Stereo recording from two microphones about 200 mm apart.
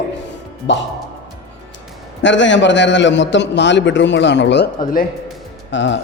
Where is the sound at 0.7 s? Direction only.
65° left (ahead or behind).